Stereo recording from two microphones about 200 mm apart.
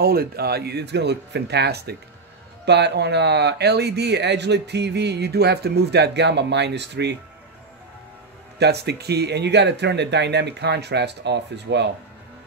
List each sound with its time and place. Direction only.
0.0 s speech: 50° right (ahead or behind)
8.5 s speech: 55° right (ahead or behind)